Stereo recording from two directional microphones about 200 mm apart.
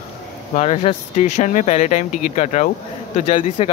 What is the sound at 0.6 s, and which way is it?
Speech, 30° left (ahead or behind).